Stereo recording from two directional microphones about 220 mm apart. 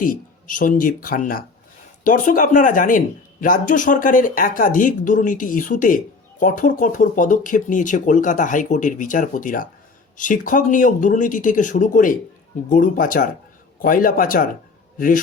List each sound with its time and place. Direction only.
0.0 s a man's voice: 40° left (ahead or behind)